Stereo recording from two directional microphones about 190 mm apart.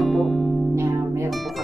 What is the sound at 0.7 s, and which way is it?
Music, 15° right (ahead or behind).